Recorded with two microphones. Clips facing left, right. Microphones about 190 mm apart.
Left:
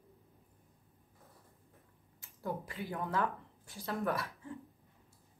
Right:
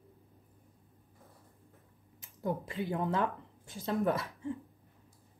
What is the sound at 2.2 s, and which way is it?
Speech, 20° right (ahead or behind).